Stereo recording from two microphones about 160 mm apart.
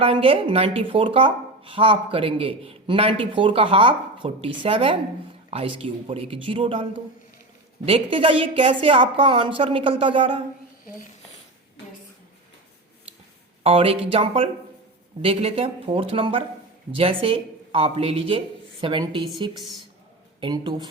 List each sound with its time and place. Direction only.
0.0 s a woman's voice: 35° right (ahead or behind)
7.9 s a woman's voice: 35° right (ahead or behind)
13.7 s a woman's voice: 35° right (ahead or behind)